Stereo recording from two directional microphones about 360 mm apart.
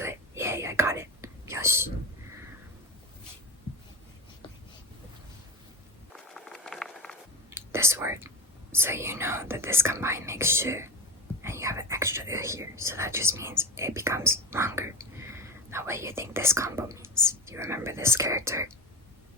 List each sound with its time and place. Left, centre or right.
0.0 s whispering: centre
6.1 s whispering: centre
8.7 s speech: centre